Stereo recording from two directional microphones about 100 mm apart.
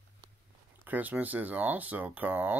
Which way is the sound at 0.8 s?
15° right (ahead or behind).